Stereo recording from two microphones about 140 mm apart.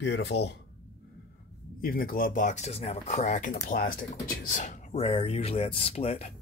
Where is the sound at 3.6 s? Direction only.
90° left.